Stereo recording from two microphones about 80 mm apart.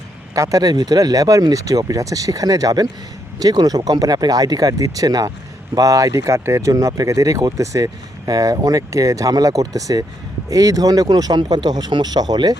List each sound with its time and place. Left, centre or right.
0.3 s speech: right